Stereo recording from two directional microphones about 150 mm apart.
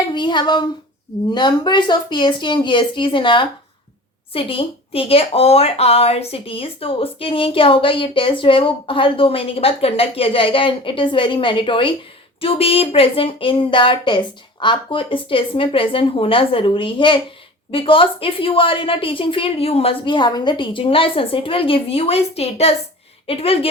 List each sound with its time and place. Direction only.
0.1 s a woman's voice: 30° left (ahead or behind)